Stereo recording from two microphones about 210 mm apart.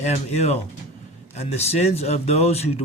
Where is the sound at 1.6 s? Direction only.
30° left (ahead or behind).